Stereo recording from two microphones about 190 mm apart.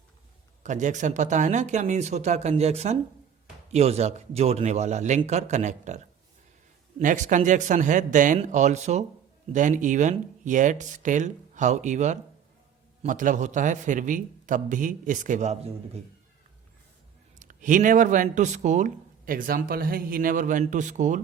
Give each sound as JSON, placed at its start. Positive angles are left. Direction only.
{"t": 0.6, "sound": "a man's voice", "side_deg": -40}
{"t": 7.0, "sound": "a man's voice", "side_deg": -40}
{"t": 17.4, "sound": "speech", "side_deg": -45}